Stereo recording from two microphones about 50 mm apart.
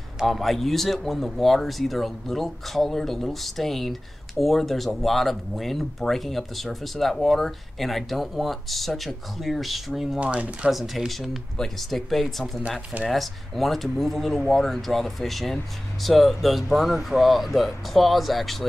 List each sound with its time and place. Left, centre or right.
0.3 s speech: centre
10.2 s speech: right
10.7 s speech: centre